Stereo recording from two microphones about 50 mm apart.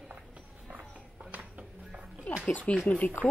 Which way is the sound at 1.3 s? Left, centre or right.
Right.